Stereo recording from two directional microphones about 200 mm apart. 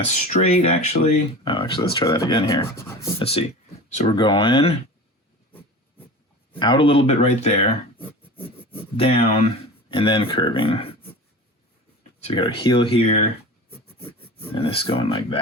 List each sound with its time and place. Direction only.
0.1 s speech: 35° left (ahead or behind); by 3.1 s 15° left (ahead or behind)
3.2 s speech: 30° left (ahead or behind)
6.6 s speech: 25° left (ahead or behind)
7.9 s a sound: 10° left (ahead or behind)
9.0 s speech: 30° left (ahead or behind)
12.2 s speech: 25° left (ahead or behind)
14.5 s speech: 25° left (ahead or behind)